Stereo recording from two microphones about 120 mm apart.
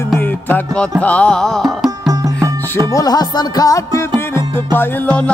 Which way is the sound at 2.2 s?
25° right (ahead or behind).